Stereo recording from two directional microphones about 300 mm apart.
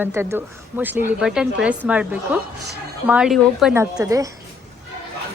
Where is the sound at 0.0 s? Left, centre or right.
Centre.